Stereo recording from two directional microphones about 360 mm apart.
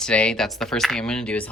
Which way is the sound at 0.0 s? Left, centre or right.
Centre.